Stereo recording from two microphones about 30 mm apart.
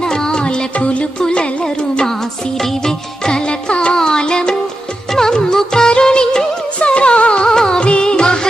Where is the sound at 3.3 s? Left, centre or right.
Left.